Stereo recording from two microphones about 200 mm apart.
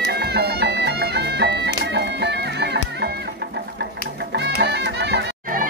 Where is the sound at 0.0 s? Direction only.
55° right (ahead or behind).